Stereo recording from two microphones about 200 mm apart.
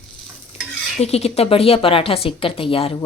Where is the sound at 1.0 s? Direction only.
30° left (ahead or behind).